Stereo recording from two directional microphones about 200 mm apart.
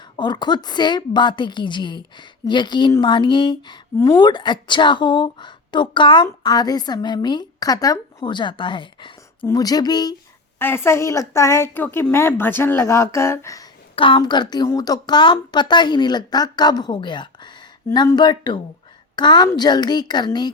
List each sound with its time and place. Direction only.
0.2 s a woman's voice: 20° left (ahead or behind)